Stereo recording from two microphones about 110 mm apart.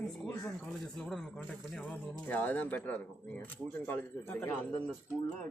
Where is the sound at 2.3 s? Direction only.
15° left (ahead or behind).